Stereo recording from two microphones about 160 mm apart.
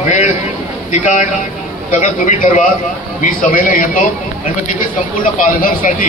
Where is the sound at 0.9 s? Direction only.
50° left (ahead or behind).